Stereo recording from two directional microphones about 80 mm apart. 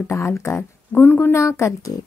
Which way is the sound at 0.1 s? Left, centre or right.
Left.